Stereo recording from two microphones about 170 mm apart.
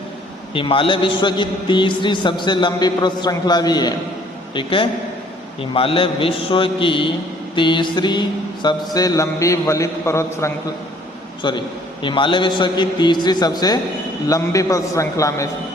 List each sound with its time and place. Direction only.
0.5 s a man's voice: 30° left (ahead or behind); by 10.5 s 15° left (ahead or behind)
11.4 s a man's voice: 25° left (ahead or behind)